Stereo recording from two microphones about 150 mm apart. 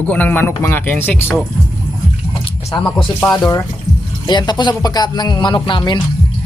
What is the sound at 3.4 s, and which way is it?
Speech, 25° left (ahead or behind).